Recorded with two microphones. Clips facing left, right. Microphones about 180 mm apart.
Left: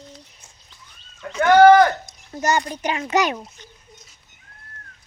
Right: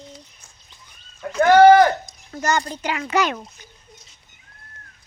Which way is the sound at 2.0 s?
20° left (ahead or behind).